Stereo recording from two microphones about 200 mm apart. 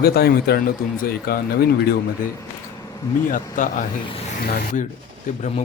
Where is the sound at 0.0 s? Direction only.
50° left (ahead or behind).